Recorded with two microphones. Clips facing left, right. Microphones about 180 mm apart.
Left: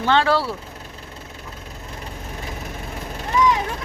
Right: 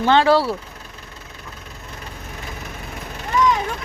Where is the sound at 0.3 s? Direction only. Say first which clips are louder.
Right 4 dB; 35° right (ahead or behind).